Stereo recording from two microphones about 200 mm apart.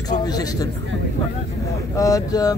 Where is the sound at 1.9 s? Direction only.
15° left (ahead or behind).